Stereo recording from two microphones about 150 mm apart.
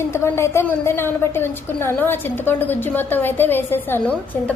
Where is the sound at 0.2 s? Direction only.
15° left (ahead or behind).